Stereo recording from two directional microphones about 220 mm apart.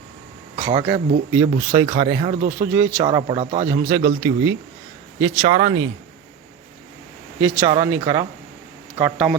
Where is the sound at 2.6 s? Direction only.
10° right (ahead or behind); by 3.7 s 30° right (ahead or behind).